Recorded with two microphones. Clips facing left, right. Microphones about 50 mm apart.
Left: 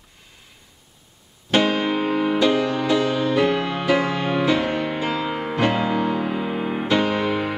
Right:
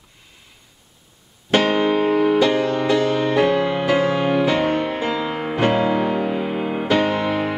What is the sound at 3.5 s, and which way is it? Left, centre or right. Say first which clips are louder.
Music: right 2 dB; centre.